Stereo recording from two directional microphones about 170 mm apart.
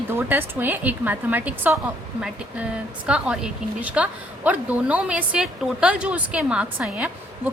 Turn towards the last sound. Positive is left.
turn(degrees=-5)  # may be behind; listen again after turning